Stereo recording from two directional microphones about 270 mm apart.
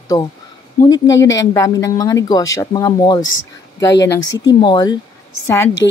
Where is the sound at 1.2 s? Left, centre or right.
Centre.